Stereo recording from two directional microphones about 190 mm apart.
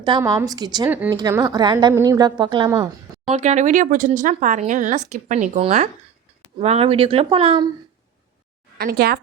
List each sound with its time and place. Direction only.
0.0 s speech: 20° right (ahead or behind)
0.9 s speech: 10° right (ahead or behind)
1.1 s speech: 20° right (ahead or behind)
3.3 s speech: 35° right (ahead or behind)
8.8 s speech: 55° right (ahead or behind)